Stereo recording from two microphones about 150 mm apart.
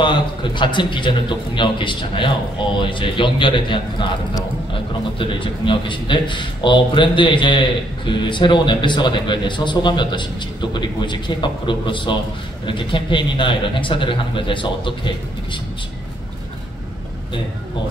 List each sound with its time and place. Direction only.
0.0 s a man's voice: 30° left (ahead or behind)